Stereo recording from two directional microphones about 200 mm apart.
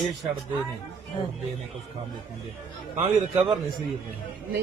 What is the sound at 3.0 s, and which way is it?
Speech, 25° right (ahead or behind).